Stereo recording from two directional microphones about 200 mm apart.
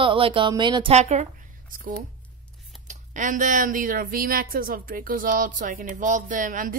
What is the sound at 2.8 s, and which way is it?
Speech, 40° right (ahead or behind).